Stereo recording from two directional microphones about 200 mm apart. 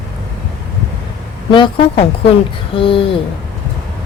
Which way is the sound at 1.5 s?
25° left (ahead or behind).